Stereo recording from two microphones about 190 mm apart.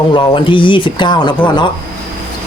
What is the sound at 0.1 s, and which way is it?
Speech, 25° left (ahead or behind).